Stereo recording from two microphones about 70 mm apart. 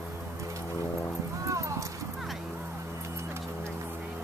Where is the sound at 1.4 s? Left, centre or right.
Right.